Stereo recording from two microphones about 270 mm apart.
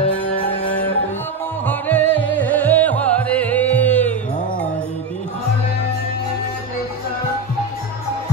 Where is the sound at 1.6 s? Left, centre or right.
Centre.